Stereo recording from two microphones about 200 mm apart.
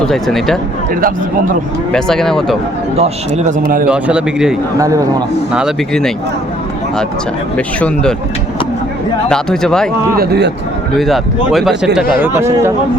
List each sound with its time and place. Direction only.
0.0 s speech: centre (ahead or behind)
1.9 s speech: centre (ahead or behind)
3.0 s a man's voice: 40° right (ahead or behind)
3.8 s speech: 5° right (ahead or behind)
4.8 s speech: 15° right (ahead or behind)
5.5 s speech: centre (ahead or behind)
7.5 s speech: 5° left (ahead or behind)
9.3 s speech: 5° left (ahead or behind)
10.2 s speech: 55° right (ahead or behind)
10.9 s speech: centre (ahead or behind)
12.2 s speech: 15° right (ahead or behind)